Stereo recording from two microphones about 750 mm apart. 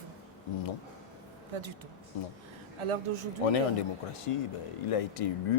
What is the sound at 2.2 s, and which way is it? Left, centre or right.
Speech, left.